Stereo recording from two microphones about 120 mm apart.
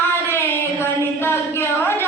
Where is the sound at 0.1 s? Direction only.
20° left (ahead or behind).